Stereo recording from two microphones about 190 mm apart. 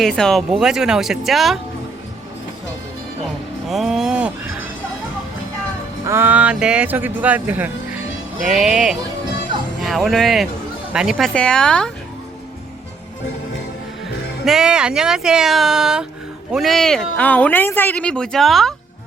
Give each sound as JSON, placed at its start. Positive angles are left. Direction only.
{"t": 0.0, "sound": "speech", "side_deg": 0}
{"t": 3.7, "sound": "speech", "side_deg": 0}
{"t": 6.1, "sound": "speech", "side_deg": -10}
{"t": 14.4, "sound": "speech", "side_deg": -5}